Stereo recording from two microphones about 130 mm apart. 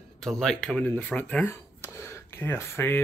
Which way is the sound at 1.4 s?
20° left (ahead or behind).